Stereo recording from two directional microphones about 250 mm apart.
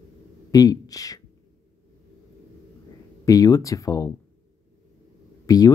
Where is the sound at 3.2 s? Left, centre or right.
Centre.